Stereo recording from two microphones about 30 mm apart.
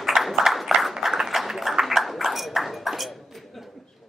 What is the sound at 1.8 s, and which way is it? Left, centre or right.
Ping, centre.